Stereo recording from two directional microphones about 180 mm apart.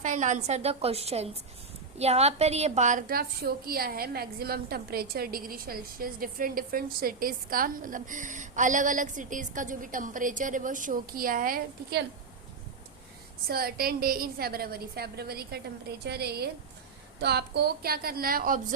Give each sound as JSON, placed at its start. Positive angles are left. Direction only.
{"t": 0.0, "sound": "a woman's voice", "side_deg": -40}
{"t": 13.5, "sound": "a woman's voice", "side_deg": -60}